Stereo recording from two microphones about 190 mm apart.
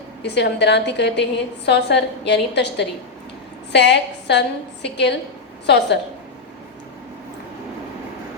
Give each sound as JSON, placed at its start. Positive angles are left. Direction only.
{"t": 0.2, "sound": "a woman's voice", "side_deg": 65}